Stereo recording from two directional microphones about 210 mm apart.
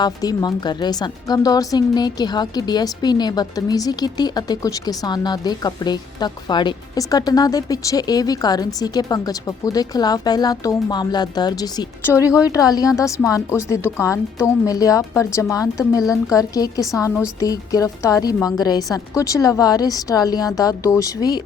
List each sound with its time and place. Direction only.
0.0 s a woman's voice: 20° left (ahead or behind)